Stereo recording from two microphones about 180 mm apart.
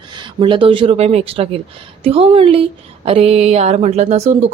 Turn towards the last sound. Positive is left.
turn(degrees=-40)  # may be behind; listen again after turning